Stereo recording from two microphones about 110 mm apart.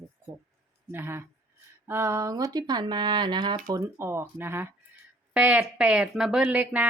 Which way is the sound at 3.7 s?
25° right (ahead or behind).